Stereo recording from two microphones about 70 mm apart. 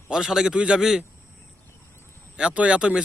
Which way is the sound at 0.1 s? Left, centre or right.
Centre.